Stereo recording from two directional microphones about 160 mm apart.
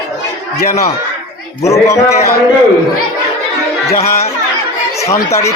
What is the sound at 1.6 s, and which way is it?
Speech, 20° left (ahead or behind).